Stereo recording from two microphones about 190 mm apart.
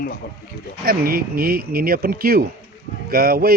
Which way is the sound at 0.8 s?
50° right (ahead or behind).